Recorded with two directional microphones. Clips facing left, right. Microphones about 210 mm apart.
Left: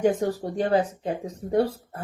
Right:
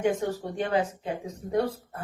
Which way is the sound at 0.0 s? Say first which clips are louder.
Left 4 dB; 35° left (ahead or behind).